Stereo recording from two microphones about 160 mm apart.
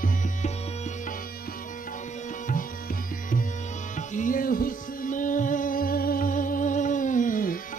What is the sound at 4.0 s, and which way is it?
Music, 55° left (ahead or behind).